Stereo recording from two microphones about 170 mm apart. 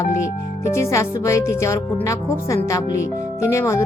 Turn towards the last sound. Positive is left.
turn(degrees=15)  # may be behind; listen again after turning